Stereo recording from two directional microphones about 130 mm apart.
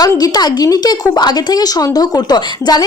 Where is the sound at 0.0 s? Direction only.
30° left (ahead or behind).